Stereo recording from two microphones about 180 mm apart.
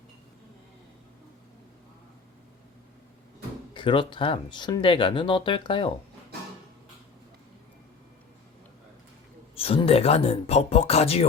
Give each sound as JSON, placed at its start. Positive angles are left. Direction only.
{"t": 3.8, "sound": "speech", "side_deg": 30}
{"t": 9.6, "sound": "speech", "side_deg": 30}